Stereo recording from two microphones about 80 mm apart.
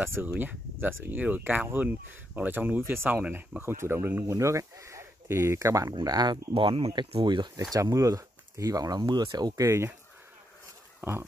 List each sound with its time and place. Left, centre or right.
0.0 s speech: right
4.3 s speech: right
6.0 s speech: right
7.0 s speech: right
7.7 s speech: right
9.6 s speech: right
11.0 s speech: right